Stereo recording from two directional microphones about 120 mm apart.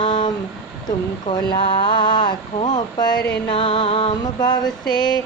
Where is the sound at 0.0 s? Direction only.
40° left (ahead or behind).